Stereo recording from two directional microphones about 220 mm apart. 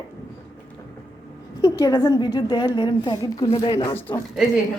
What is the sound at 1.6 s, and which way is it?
A woman's voice, 15° left (ahead or behind).